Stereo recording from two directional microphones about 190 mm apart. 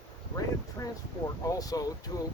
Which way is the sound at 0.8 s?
15° left (ahead or behind).